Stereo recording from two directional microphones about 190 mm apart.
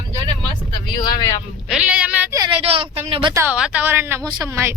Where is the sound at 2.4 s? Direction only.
30° right (ahead or behind).